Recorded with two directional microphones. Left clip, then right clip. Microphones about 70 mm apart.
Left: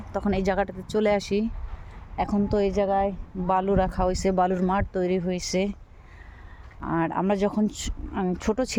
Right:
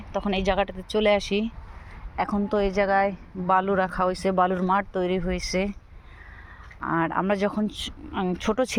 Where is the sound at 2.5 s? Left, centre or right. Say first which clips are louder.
Right 2 dB; left.